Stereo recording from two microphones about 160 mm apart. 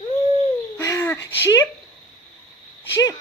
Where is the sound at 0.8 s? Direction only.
20° left (ahead or behind).